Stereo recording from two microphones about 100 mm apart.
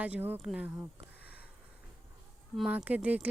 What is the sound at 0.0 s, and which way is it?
Speech, 15° right (ahead or behind).